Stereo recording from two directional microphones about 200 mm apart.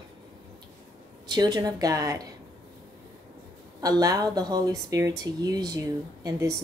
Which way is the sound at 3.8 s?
15° right (ahead or behind).